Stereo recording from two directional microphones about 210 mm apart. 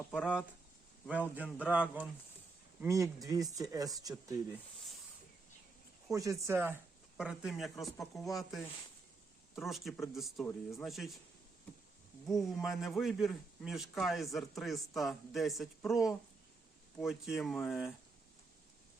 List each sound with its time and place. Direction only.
0.1 s a man's voice: centre (ahead or behind)
6.1 s a man's voice: 15° right (ahead or behind)
12.2 s a man's voice: centre (ahead or behind)